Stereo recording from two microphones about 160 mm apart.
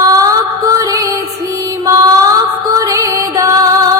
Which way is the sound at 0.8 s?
20° right (ahead or behind).